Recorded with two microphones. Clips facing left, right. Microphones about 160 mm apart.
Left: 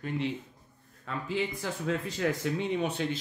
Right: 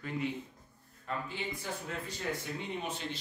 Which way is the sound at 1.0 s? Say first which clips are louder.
Left 6 dB; 90° left.